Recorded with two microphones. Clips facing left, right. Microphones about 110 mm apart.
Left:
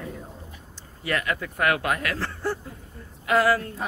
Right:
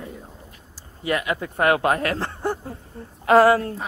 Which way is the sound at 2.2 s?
20° right (ahead or behind).